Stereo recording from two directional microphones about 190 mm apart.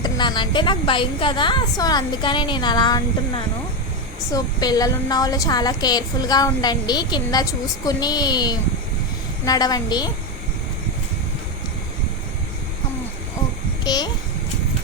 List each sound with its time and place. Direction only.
0.0 s a woman's voice: 25° left (ahead or behind)
13.8 s a woman's voice: 20° left (ahead or behind)